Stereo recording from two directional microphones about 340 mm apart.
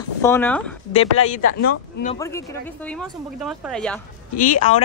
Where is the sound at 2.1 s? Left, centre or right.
Centre.